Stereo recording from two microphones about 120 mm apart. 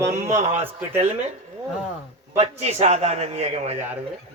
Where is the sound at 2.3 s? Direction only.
60° right (ahead or behind).